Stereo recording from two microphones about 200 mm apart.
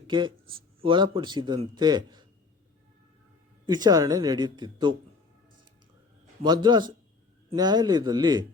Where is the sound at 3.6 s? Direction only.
20° right (ahead or behind).